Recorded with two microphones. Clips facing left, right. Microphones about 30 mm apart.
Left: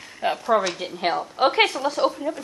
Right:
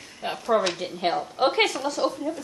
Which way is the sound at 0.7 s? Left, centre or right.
Centre.